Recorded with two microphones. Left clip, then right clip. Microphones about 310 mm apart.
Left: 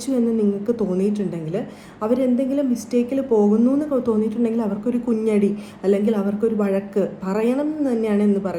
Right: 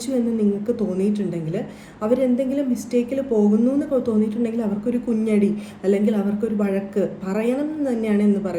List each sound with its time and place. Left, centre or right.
0.3 s a woman's voice: centre